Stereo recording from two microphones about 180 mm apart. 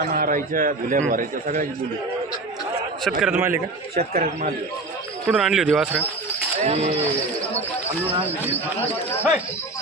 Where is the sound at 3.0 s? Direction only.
Centre (ahead or behind).